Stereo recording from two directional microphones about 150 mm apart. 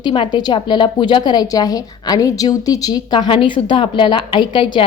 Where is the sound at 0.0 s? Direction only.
30° left (ahead or behind).